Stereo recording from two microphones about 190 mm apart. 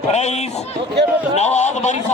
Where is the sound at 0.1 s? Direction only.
35° left (ahead or behind).